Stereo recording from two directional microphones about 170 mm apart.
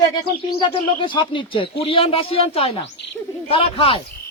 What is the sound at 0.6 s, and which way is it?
Speech, 30° left (ahead or behind).